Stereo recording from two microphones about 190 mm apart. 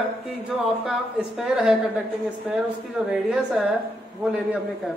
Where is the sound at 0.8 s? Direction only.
5° right (ahead or behind).